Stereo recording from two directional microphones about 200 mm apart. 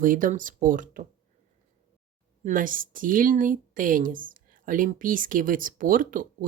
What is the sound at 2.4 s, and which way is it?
A woman's voice, 40° right (ahead or behind).